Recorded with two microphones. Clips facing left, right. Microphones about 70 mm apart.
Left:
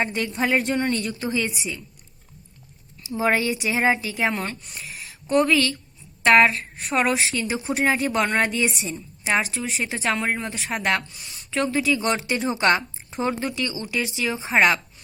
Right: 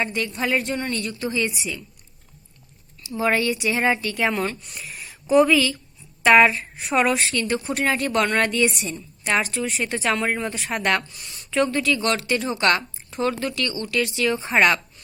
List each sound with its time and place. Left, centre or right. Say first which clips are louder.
0.0 s a woman's voice: left 1 dB; left
1.2 s speech: right 3 dB; left
1.5 s a woman's voice: right 1 dB; centre
3.2 s speech: even; left
3.7 s a woman's voice: left 2 dB; centre
12.1 s a woman's voice: even; left; by 14.8 s centre